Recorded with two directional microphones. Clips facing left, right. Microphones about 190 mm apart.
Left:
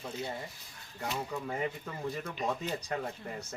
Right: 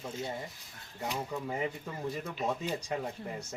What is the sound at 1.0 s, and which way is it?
Speech, 15° right (ahead or behind).